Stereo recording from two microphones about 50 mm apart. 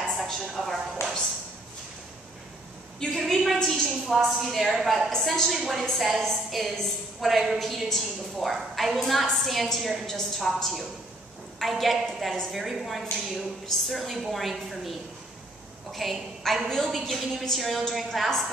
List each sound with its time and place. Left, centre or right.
0.0 s a sound: centre
3.2 s a woman's voice: centre
15.9 s a woman's voice: centre